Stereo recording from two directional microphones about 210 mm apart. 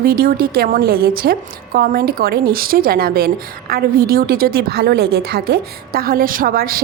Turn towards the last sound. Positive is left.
turn(degrees=-45)  # may be behind; listen again after turning